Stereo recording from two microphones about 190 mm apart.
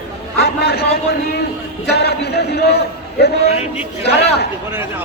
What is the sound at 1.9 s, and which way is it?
A man's voice, 60° left (ahead or behind).